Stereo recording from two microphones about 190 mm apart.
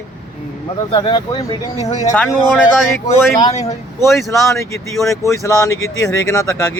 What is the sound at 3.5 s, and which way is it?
Speech, 35° left (ahead or behind).